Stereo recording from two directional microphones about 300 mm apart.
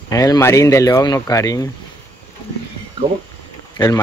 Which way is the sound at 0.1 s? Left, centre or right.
Centre.